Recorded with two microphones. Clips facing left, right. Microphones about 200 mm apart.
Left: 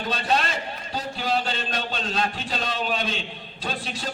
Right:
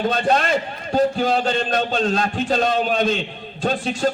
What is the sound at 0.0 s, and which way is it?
A man's voice, 50° right (ahead or behind).